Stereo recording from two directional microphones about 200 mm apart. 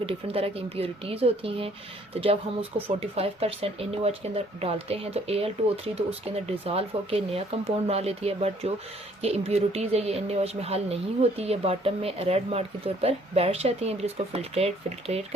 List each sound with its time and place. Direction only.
0.0 s speech: 30° right (ahead or behind)